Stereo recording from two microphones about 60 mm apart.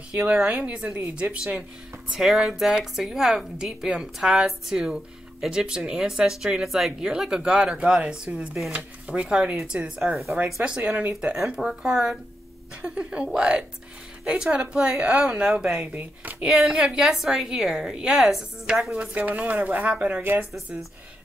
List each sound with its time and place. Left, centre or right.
0.1 s speech: centre
2.0 s a woman's voice: centre
10.1 s speech: centre
10.4 s speech: centre
11.3 s a woman's voice: centre
15.9 s speech: right
16.4 s a woman's voice: centre
19.2 s speech: right